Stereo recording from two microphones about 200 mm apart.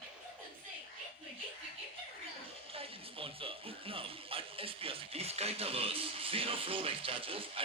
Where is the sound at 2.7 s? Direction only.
30° right (ahead or behind).